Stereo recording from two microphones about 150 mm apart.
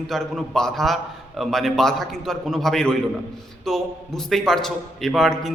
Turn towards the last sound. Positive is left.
turn(degrees=0)  # may be behind; listen again after turning